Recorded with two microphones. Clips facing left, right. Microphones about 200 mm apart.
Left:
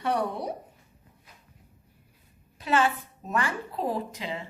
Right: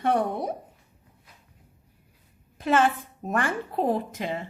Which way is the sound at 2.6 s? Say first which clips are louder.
Right 3 dB; 50° right (ahead or behind).